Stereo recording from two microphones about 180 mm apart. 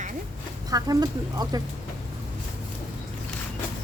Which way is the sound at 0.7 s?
20° right (ahead or behind).